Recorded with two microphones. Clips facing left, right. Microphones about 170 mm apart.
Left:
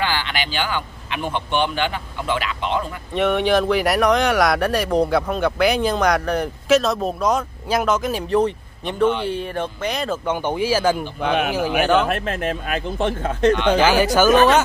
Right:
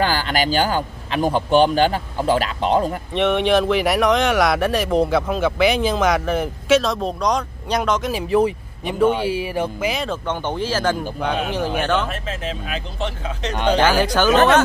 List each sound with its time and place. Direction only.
0.0 s a man's voice: 40° right (ahead or behind)
3.2 s speech: centre (ahead or behind)
10.2 s speech: 10° left (ahead or behind)
12.1 s speech: 55° left (ahead or behind)
13.7 s speech: 10° left (ahead or behind)